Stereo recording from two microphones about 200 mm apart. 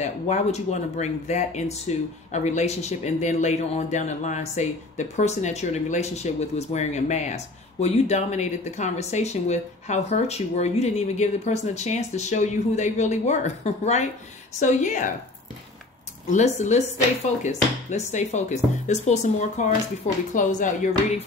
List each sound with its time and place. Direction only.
0.0 s speech: 35° left (ahead or behind)
16.3 s speech: 35° left (ahead or behind)